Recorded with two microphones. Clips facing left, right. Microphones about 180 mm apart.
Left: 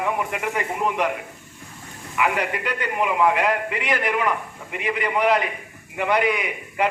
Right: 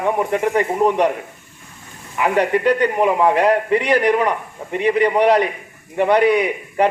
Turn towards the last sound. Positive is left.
turn(degrees=-35)  # may be behind; listen again after turning